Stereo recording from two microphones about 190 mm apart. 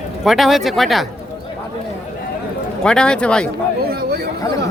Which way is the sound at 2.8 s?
5° left (ahead or behind).